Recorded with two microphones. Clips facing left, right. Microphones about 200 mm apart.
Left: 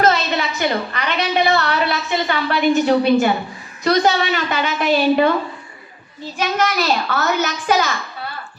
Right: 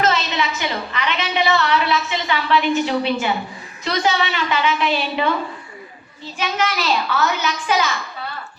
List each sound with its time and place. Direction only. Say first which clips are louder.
0.0 s a woman's voice: left 3 dB; 45° left (ahead or behind)
6.4 s a woman's voice: left 3 dB; 45° left (ahead or behind)